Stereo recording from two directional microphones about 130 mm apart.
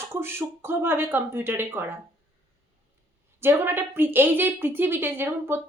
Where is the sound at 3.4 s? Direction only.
20° right (ahead or behind).